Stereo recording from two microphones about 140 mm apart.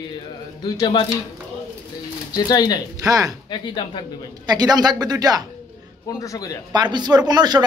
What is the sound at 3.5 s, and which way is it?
Speech, 35° left (ahead or behind).